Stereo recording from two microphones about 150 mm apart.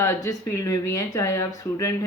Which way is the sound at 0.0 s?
20° left (ahead or behind).